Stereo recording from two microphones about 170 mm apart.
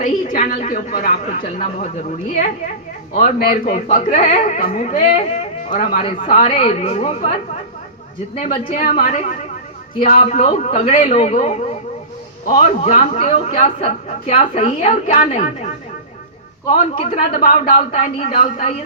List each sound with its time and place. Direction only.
0.0 s a woman's voice: 50° left (ahead or behind)
3.3 s a woman's voice: 60° left (ahead or behind)
3.8 s speech: 45° left (ahead or behind)
6.2 s a woman's voice: 40° left (ahead or behind)
8.7 s a woman's voice: 55° left (ahead or behind)
16.7 s speech: 50° left (ahead or behind)